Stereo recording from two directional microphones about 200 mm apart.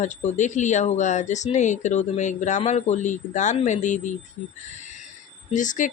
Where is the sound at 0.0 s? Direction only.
35° left (ahead or behind).